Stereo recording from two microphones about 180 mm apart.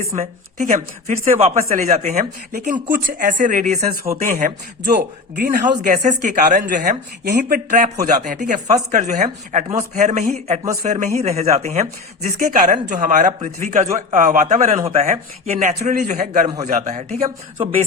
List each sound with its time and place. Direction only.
0.2 s a woman's voice: 40° right (ahead or behind)